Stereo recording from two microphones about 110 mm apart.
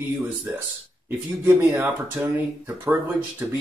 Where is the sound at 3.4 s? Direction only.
20° right (ahead or behind).